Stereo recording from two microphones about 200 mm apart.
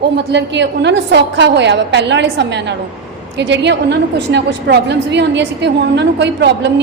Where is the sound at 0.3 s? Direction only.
60° right (ahead or behind).